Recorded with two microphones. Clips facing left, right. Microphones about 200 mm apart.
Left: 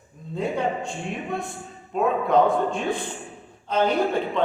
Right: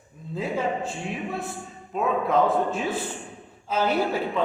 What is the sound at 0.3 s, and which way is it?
Speech, 5° right (ahead or behind).